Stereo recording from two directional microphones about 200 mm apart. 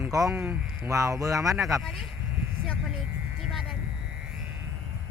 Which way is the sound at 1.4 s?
Centre (ahead or behind).